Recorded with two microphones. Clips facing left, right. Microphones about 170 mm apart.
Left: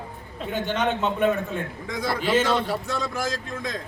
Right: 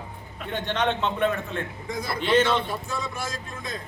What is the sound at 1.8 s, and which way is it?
Speech, 90° left.